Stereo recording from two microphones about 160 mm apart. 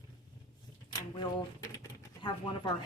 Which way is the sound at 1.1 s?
25° left (ahead or behind).